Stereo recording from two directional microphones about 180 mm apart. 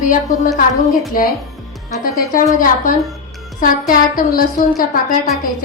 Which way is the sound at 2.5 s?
50° left (ahead or behind).